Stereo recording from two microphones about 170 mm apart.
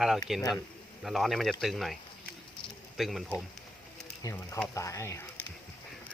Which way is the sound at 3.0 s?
Centre (ahead or behind).